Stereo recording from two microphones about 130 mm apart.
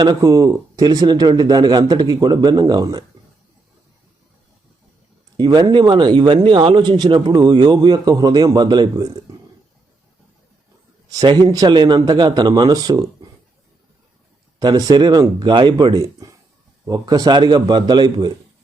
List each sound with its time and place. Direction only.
0.0 s speech: 30° right (ahead or behind)
5.4 s speech: 30° right (ahead or behind)
11.1 s speech: 30° right (ahead or behind)
14.6 s speech: 30° right (ahead or behind)